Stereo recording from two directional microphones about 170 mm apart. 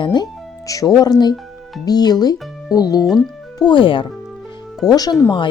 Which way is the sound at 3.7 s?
30° left (ahead or behind).